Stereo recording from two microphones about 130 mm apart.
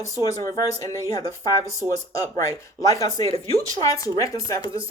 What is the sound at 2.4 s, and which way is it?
Speech, 25° left (ahead or behind).